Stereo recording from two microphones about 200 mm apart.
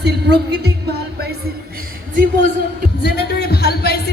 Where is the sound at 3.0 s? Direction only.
55° left (ahead or behind).